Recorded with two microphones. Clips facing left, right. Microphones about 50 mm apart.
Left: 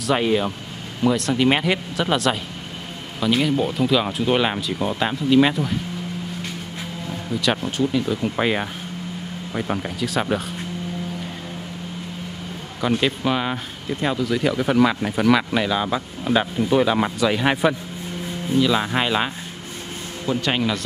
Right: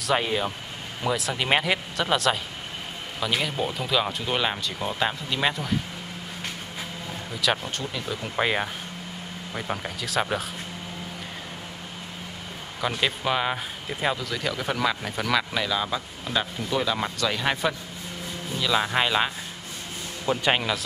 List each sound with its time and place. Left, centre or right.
0.0 s speech: centre
7.3 s speech: centre
12.8 s speech: centre
18.5 s speech: centre
20.2 s speech: centre